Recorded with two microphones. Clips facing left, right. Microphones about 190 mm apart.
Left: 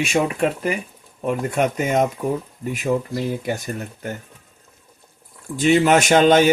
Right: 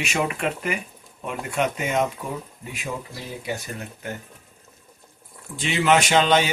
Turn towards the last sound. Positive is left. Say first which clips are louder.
# left 6 dB
turn(degrees=50)  # may be behind; listen again after turning